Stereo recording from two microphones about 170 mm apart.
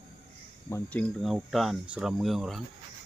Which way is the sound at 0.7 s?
10° left (ahead or behind).